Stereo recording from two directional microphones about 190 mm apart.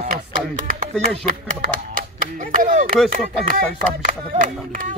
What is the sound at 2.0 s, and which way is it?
Speech, 45° right (ahead or behind).